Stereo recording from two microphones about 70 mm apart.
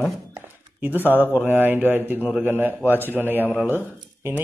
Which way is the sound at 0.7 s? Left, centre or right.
Right.